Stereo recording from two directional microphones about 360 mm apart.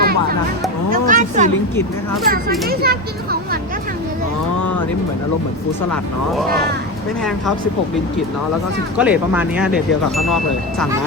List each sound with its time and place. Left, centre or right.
0.0 s music: right
1.0 s speech: right
5.9 s speech: centre
9.0 s speech: centre